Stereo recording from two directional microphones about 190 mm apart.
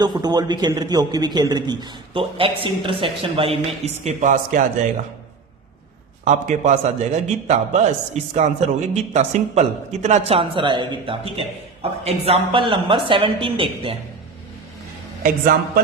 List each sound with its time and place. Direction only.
0.0 s speech: 20° right (ahead or behind); by 4.6 s 40° right (ahead or behind)
6.2 s a man's voice: 40° right (ahead or behind)
15.2 s speech: 50° right (ahead or behind)